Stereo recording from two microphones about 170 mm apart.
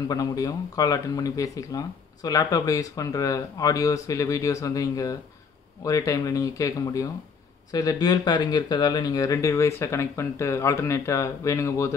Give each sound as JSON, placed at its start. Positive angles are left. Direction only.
{"t": 0.1, "sound": "speech", "side_deg": 20}